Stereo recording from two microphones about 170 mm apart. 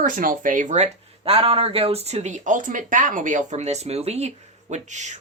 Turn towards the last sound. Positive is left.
turn(degrees=-45)  # may be behind; listen again after turning